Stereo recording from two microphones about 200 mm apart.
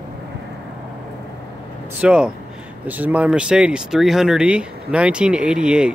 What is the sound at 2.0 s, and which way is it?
Speech, 5° right (ahead or behind).